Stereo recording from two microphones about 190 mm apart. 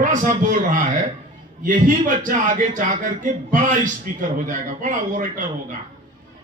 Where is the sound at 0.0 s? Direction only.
40° right (ahead or behind).